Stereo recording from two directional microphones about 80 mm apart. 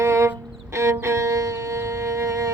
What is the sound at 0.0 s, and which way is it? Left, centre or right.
Music, right.